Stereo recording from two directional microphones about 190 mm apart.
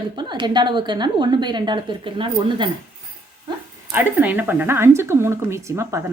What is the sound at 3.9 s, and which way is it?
Speech, 10° right (ahead or behind).